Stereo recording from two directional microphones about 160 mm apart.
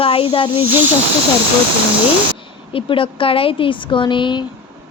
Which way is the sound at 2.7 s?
35° left (ahead or behind).